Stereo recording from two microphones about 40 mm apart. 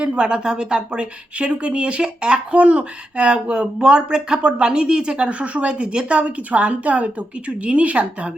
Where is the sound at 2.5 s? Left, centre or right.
Right.